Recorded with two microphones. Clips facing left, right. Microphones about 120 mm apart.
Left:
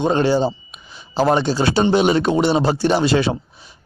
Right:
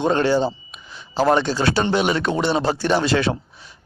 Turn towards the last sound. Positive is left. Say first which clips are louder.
# left 2 dB
turn(degrees=10)  # may be behind; listen again after turning